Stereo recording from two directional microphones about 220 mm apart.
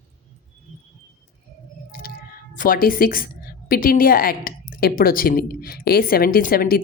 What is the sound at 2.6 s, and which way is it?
A woman's voice, 40° left (ahead or behind).